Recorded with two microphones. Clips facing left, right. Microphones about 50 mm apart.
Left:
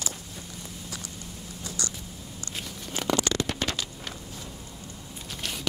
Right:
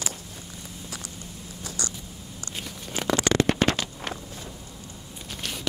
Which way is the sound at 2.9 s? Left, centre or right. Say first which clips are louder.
Right 4 dB; right.